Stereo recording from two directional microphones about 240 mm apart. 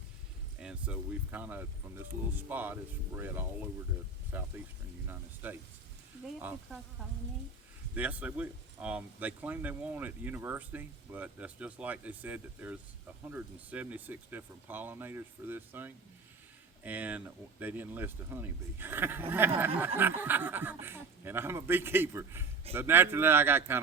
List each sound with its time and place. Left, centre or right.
0.6 s speech: centre
7.9 s speech: centre